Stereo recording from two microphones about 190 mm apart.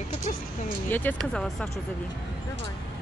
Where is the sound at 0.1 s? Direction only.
40° left (ahead or behind).